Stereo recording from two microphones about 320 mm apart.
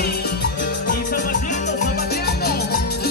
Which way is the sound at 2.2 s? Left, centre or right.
Left.